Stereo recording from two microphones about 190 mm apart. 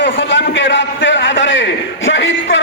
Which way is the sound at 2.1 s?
80° left.